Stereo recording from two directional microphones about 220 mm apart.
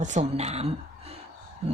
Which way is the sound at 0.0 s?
30° right (ahead or behind).